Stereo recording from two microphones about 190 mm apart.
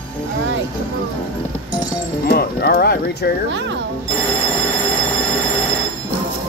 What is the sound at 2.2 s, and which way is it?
Speech, 55° left (ahead or behind).